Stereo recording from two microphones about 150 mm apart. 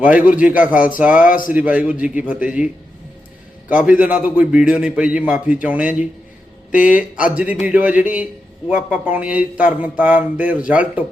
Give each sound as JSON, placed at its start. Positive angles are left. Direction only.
{"t": 0.7, "sound": "speech", "side_deg": 65}
{"t": 0.9, "sound": "speech", "side_deg": -10}
{"t": 1.3, "sound": "speech", "side_deg": 65}
{"t": 1.5, "sound": "speech", "side_deg": -10}
{"t": 3.8, "sound": "speech", "side_deg": -10}